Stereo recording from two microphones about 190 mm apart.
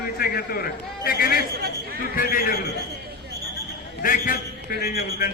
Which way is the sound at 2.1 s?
50° left (ahead or behind).